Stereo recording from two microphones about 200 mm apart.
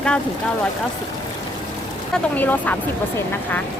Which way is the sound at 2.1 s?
10° left (ahead or behind).